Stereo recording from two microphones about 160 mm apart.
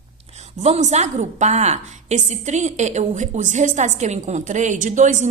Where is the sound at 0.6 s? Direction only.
45° right (ahead or behind).